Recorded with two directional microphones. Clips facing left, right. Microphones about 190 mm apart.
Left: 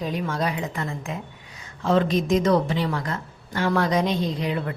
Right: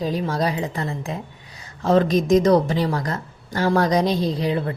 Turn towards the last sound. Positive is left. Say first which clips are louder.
# right 4 dB
turn(degrees=-30)  # may be behind; listen again after turning